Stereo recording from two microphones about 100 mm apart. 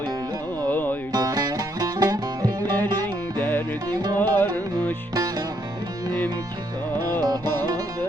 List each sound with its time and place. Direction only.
0.7 s music: 20° left (ahead or behind)
1.1 s music: 40° right (ahead or behind)
3.8 s music: 45° right (ahead or behind)
4.2 s music: 20° left (ahead or behind)
7.2 s music: 40° right (ahead or behind)